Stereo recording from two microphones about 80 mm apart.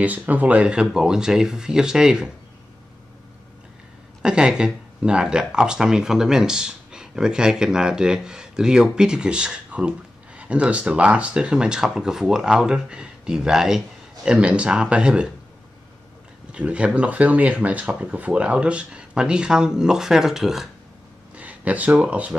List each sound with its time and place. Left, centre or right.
0.0 s speech: right
4.2 s speech: centre
16.5 s speech: centre
21.4 s speech: centre